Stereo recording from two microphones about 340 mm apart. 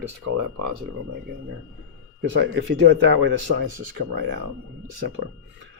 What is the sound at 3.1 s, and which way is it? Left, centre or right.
Speech, right.